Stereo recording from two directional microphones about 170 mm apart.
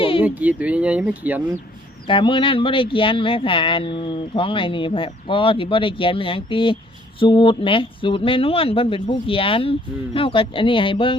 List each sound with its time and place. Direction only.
0.0 s a sound: 30° left (ahead or behind)
0.3 s speech: 10° right (ahead or behind)
2.0 s speech: 30° left (ahead or behind)